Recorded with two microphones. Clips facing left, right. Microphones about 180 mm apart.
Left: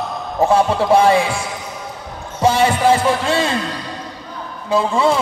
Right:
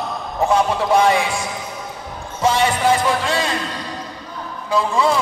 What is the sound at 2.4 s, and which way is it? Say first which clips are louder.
Music: left 3 dB; 30° left (ahead or behind).